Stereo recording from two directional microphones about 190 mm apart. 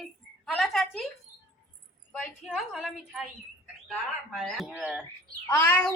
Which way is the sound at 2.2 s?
Centre (ahead or behind).